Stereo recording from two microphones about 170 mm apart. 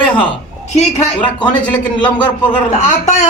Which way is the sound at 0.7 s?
40° left (ahead or behind).